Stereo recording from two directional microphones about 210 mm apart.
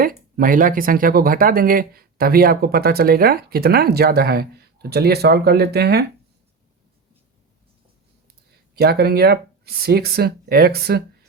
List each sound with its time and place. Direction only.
0.0 s speech: 40° right (ahead or behind)
8.8 s speech: 50° right (ahead or behind)